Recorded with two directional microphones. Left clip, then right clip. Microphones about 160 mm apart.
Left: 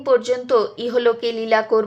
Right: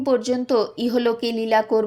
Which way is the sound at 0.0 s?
40° right (ahead or behind).